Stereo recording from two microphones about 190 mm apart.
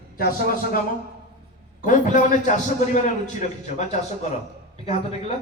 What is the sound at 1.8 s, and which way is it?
Speech, 40° left (ahead or behind).